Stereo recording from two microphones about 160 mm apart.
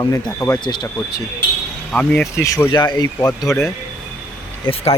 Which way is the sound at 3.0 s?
25° left (ahead or behind).